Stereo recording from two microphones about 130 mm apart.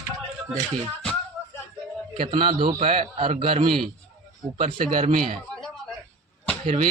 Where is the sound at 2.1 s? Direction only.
40° right (ahead or behind).